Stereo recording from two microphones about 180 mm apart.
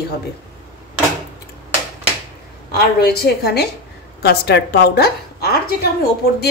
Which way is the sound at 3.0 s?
60° left (ahead or behind).